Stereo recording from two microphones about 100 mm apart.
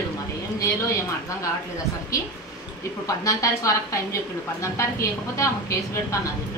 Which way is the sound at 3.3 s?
30° left (ahead or behind).